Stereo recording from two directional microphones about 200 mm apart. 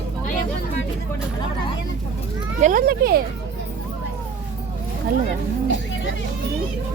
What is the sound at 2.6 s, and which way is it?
Speech, 40° right (ahead or behind).